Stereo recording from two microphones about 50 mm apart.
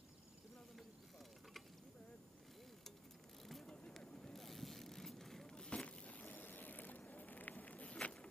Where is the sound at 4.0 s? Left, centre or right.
Centre.